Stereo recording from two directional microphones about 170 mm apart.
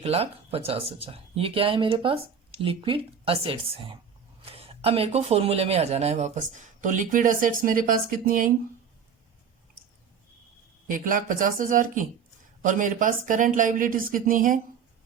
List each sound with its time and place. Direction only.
0.0 s speech: 35° right (ahead or behind); by 8.5 s 55° right (ahead or behind)
10.8 s speech: 50° right (ahead or behind)